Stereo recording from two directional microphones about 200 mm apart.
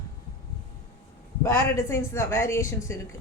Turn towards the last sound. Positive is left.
turn(degrees=15)  # may be behind; listen again after turning